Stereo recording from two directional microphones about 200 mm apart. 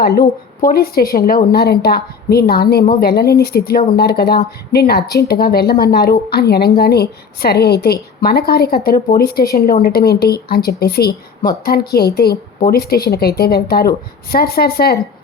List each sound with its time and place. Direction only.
0.0 s a woman's voice: 50° left (ahead or behind)